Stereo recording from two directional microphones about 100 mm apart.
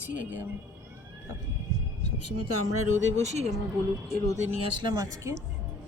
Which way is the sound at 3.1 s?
90° right.